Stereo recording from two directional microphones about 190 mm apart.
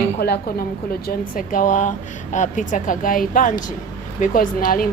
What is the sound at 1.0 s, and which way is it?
Speech, 45° left (ahead or behind).